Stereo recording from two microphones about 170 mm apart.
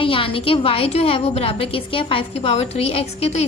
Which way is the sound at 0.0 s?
30° left (ahead or behind).